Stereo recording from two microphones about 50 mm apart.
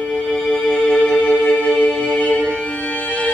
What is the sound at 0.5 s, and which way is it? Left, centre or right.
Music, left.